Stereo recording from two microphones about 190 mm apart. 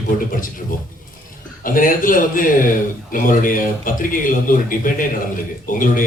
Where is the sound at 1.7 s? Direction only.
45° left (ahead or behind).